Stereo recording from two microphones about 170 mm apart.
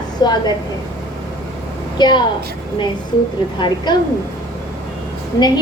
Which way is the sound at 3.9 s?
25° left (ahead or behind).